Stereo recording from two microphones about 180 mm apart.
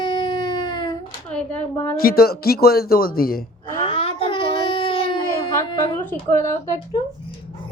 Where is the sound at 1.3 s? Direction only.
5° left (ahead or behind).